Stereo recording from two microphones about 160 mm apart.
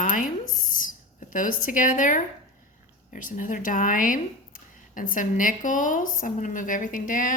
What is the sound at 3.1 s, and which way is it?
Speech, 55° left (ahead or behind).